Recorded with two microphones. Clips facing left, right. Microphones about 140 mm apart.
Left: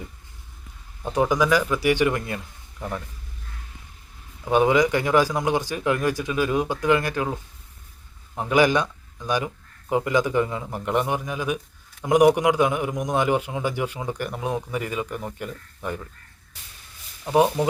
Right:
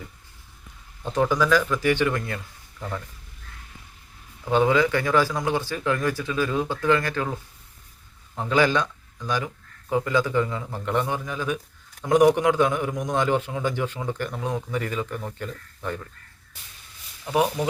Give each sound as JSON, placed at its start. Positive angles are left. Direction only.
{"t": 1.0, "sound": "a man's voice", "side_deg": 15}
{"t": 4.4, "sound": "a man's voice", "side_deg": 15}
{"t": 8.4, "sound": "a man's voice", "side_deg": 15}
{"t": 17.2, "sound": "speech", "side_deg": 25}